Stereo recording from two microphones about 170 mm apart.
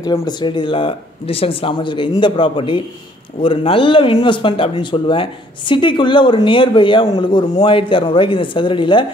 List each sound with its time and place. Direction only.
0.0 s speech: 25° left (ahead or behind)